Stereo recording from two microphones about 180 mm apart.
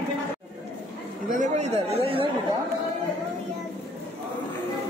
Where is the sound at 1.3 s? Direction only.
40° right (ahead or behind).